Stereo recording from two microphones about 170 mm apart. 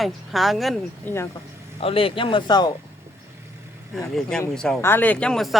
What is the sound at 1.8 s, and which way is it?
Speech, 35° left (ahead or behind).